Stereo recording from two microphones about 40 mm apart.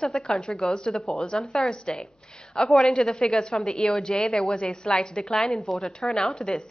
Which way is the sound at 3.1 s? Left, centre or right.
Left.